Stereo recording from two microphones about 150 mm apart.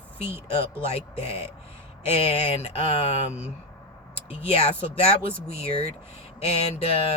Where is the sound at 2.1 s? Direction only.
40° left (ahead or behind).